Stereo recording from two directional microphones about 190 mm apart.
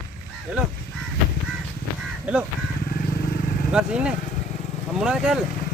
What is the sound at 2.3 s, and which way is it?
Crow, 5° right (ahead or behind).